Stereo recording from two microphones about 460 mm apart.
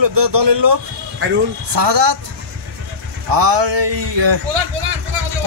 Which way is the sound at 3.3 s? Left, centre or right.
Right.